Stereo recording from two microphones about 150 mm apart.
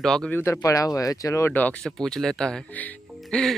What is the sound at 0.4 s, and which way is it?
Speech, 20° left (ahead or behind).